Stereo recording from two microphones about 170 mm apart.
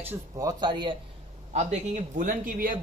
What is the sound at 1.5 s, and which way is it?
Speech, 40° right (ahead or behind).